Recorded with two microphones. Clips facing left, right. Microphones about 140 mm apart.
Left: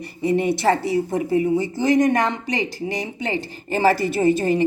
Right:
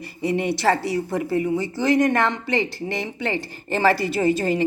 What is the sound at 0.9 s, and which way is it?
Speech, 20° left (ahead or behind).